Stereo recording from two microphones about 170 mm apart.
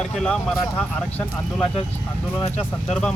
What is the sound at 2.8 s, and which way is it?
Speech, 5° left (ahead or behind).